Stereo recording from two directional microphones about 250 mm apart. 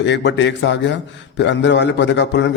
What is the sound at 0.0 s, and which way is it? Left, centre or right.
A man's voice, left.